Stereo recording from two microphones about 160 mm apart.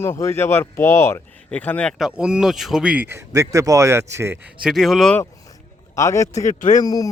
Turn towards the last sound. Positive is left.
turn(degrees=25)  # may be behind; listen again after turning